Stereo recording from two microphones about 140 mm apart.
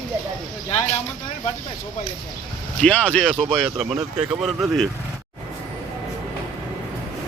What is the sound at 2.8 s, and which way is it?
Speech, 10° left (ahead or behind).